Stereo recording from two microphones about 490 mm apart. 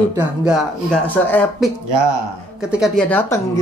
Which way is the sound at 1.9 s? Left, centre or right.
Right.